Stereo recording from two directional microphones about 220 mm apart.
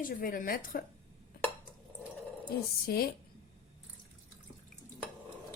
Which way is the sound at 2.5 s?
45° left (ahead or behind).